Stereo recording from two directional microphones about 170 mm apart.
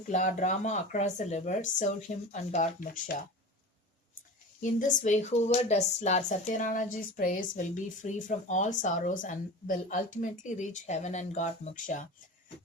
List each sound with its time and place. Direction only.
0.1 s speech: 45° left (ahead or behind)
4.6 s speech: 50° left (ahead or behind)